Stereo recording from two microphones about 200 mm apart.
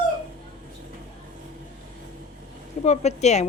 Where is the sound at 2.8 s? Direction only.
35° left (ahead or behind).